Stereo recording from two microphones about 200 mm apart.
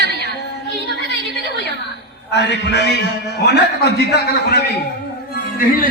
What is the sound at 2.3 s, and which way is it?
A man's voice, 60° left (ahead or behind).